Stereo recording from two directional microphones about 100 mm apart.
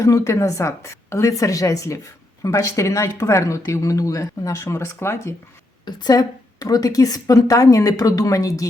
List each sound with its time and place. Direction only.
0.0 s speech: 35° left (ahead or behind)
5.8 s speech: 45° left (ahead or behind)